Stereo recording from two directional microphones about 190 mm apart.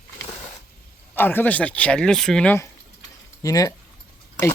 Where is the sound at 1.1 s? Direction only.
10° left (ahead or behind).